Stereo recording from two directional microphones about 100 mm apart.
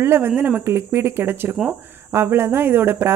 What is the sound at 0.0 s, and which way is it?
Speech, 25° right (ahead or behind).